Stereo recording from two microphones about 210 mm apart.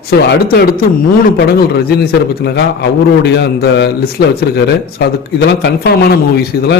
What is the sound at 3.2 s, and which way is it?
A man's voice, 50° left (ahead or behind).